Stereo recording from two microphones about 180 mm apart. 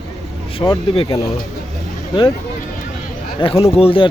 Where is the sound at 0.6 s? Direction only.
25° left (ahead or behind).